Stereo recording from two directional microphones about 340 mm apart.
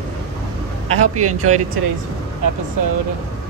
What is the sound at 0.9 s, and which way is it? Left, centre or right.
Speech, right.